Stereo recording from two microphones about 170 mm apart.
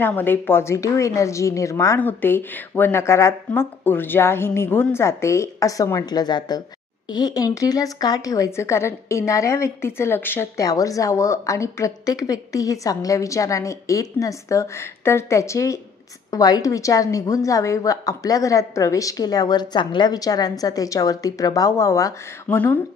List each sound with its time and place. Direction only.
0.0 s speech: 10° left (ahead or behind)